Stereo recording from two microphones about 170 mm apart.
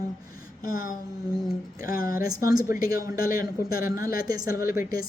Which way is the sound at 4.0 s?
20° right (ahead or behind).